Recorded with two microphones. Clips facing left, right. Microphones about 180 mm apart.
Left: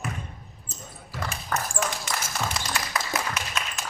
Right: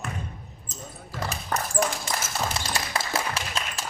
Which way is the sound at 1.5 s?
25° right (ahead or behind).